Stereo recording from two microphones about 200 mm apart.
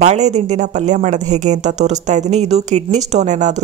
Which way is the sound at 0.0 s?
35° right (ahead or behind).